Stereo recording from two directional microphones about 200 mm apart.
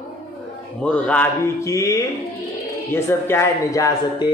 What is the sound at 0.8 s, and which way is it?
A man's voice, 5° left (ahead or behind).